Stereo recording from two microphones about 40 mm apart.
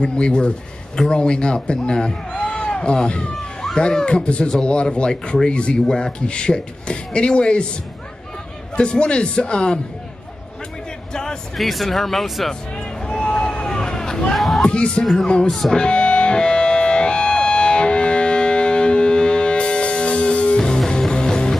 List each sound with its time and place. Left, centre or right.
0.0 s a man's voice: left
8.7 s a man's voice: left
11.5 s speech: centre
13.0 s a sound: left
14.3 s a sound: centre
14.6 s a man's voice: left
15.7 s music: left